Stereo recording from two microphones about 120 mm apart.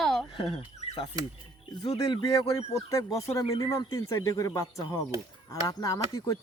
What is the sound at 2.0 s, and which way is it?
Speech, 35° left (ahead or behind).